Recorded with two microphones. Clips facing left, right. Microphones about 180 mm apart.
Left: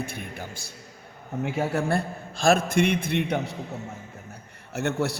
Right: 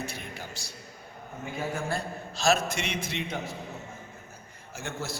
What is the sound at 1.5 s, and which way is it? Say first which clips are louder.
A man's voice: left 6 dB; 65° left (ahead or behind).